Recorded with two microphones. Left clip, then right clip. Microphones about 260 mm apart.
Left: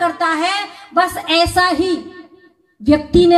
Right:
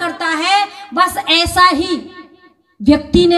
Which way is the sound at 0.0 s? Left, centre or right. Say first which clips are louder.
Left 1 dB; right.